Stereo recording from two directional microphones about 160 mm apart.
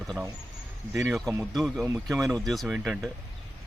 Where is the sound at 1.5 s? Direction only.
Centre (ahead or behind).